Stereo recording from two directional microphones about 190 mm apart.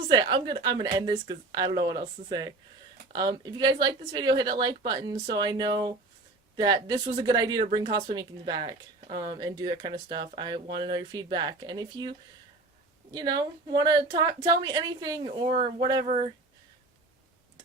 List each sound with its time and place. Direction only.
0.1 s a woman's voice: 25° right (ahead or behind)
13.1 s a woman's voice: 20° right (ahead or behind)
16.0 s speech: 30° right (ahead or behind)